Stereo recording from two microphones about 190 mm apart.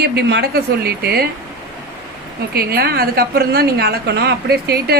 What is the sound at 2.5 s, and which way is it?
A woman's voice, 55° right (ahead or behind).